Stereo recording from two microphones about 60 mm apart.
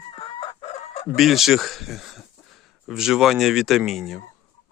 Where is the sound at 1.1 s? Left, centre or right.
Centre.